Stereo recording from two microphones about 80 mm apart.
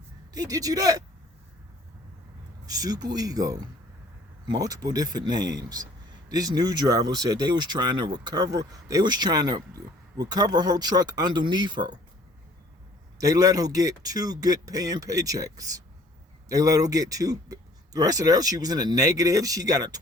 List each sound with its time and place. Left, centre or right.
0.3 s speech: right
2.6 s a man's voice: right
13.1 s speech: right